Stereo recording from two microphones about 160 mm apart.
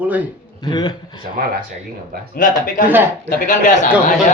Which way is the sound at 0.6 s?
25° left (ahead or behind).